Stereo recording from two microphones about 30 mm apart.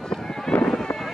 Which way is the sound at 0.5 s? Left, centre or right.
Left.